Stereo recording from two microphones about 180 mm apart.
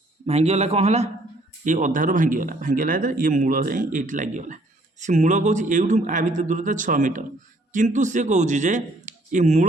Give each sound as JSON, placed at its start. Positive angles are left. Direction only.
{"t": 0.3, "sound": "a man's voice", "side_deg": -35}